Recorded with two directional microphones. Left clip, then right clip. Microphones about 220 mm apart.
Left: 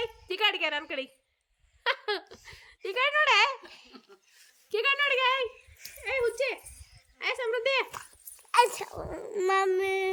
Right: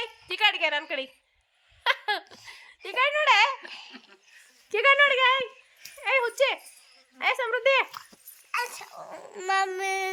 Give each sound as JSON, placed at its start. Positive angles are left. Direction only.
{"t": 0.0, "sound": "a sound", "side_deg": 0}
{"t": 1.8, "sound": "speech", "side_deg": 0}
{"t": 4.7, "sound": "speech", "side_deg": -10}
{"t": 8.6, "sound": "speech", "side_deg": 25}